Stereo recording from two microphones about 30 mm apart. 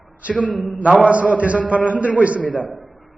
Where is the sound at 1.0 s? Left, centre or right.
Right.